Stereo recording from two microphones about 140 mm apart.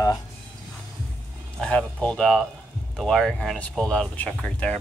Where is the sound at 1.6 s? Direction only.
5° left (ahead or behind).